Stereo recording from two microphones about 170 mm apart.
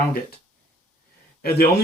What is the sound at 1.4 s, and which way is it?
Speech, 65° left (ahead or behind).